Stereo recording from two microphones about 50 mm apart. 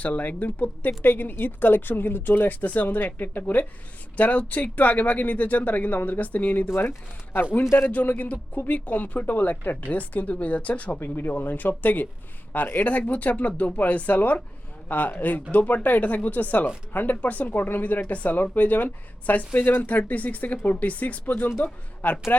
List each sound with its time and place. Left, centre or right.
0.0 s speech: left
7.8 s speech: left
11.0 s speech: left
17.2 s speech: left